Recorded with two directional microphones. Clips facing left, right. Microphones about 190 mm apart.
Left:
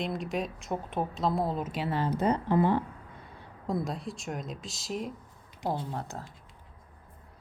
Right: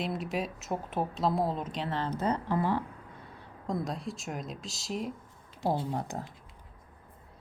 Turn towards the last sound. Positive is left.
turn(degrees=-15)  # may be behind; listen again after turning